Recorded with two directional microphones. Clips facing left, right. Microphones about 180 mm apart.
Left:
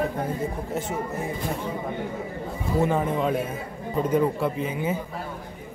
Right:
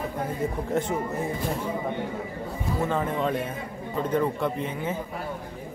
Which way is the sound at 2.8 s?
10° left (ahead or behind).